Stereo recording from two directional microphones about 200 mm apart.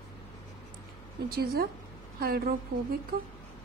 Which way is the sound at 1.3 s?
50° right (ahead or behind).